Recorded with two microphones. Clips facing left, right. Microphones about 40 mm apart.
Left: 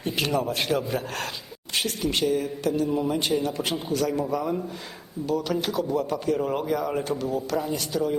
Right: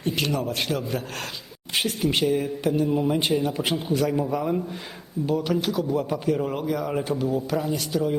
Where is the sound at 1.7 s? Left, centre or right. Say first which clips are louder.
Right 2 dB; centre.